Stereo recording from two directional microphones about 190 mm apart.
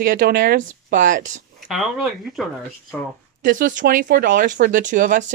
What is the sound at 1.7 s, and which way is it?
Speech, centre (ahead or behind).